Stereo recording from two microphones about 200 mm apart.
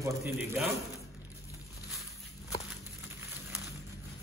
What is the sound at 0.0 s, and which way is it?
Speech, 15° right (ahead or behind).